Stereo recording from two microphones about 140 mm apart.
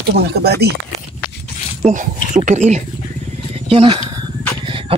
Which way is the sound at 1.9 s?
65° right (ahead or behind).